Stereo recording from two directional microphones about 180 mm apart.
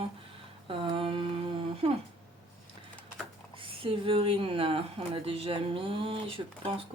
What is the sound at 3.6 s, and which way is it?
Speech, 30° right (ahead or behind).